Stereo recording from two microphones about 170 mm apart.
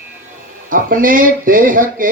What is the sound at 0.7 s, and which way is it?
Speech, 55° right (ahead or behind).